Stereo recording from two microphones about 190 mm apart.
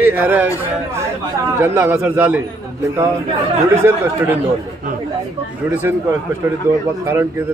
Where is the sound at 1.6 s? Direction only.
10° right (ahead or behind).